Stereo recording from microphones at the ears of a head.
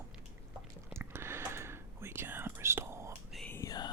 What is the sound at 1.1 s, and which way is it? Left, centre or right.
Whispering, right.